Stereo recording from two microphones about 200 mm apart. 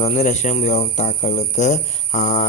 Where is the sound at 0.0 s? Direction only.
35° left (ahead or behind).